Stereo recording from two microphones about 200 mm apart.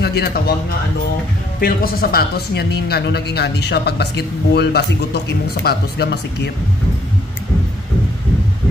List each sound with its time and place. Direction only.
0.0 s speech: 50° left (ahead or behind)